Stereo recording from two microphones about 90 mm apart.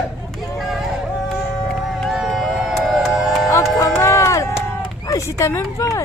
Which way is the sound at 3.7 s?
35° left (ahead or behind).